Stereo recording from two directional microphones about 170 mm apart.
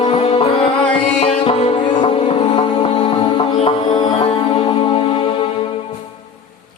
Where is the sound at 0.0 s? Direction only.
35° left (ahead or behind).